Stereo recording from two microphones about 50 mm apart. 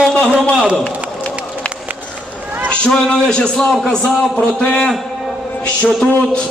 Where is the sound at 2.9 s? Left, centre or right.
Centre.